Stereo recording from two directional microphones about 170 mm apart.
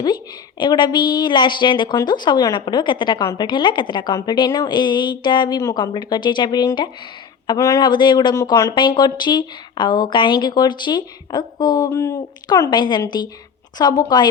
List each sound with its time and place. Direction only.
0.6 s speech: 25° left (ahead or behind)